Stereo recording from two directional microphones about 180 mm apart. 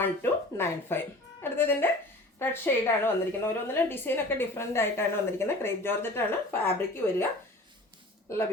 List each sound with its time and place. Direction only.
0.0 s a woman's voice: 15° left (ahead or behind)
8.3 s a woman's voice: 15° left (ahead or behind)